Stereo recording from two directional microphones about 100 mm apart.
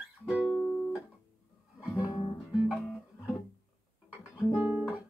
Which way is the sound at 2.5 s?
10° right (ahead or behind).